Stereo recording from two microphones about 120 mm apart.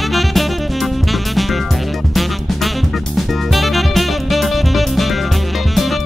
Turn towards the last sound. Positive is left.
turn(degrees=0)  # may be behind; listen again after turning